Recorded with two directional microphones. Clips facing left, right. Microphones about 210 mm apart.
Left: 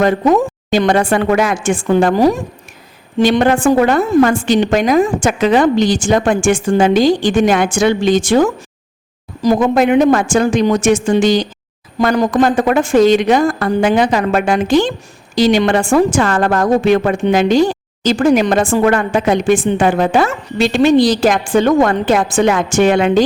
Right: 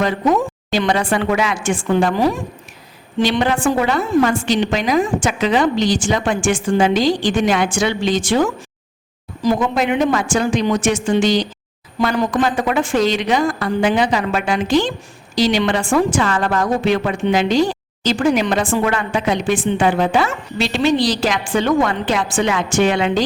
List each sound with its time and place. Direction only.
0.0 s a woman's voice: 50° left (ahead or behind)